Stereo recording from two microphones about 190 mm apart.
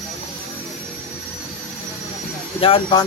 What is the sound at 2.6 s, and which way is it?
Speech, 30° left (ahead or behind).